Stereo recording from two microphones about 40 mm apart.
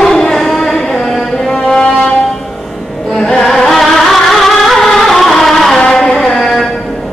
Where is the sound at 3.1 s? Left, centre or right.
Centre.